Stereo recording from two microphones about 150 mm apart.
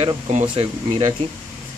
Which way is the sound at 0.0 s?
45° right (ahead or behind).